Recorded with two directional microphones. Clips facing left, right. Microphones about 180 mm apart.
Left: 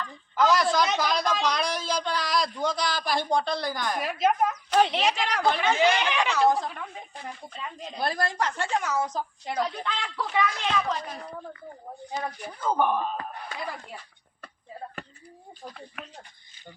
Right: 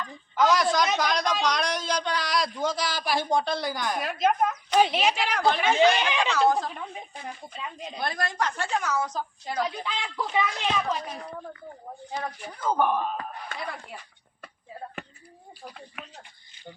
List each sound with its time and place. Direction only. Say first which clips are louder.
0.3 s a man's voice: even; centre (ahead or behind); by 7.3 s 20° right (ahead or behind)
7.5 s a man's voice: right 1 dB; 5° right (ahead or behind)
7.9 s a woman's voice: left 2 dB; 30° left (ahead or behind)
9.6 s speech: even; 5° right (ahead or behind)
10.8 s speech: even; 10° right (ahead or behind)
12.2 s a man's voice: even; 5° left (ahead or behind)
15.6 s a man's voice: left 1 dB; 5° right (ahead or behind)